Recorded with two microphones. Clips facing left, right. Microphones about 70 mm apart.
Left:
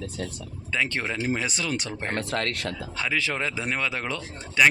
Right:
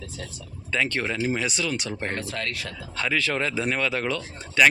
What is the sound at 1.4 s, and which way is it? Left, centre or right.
Speech, left.